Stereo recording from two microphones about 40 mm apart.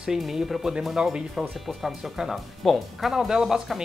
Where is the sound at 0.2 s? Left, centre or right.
Centre.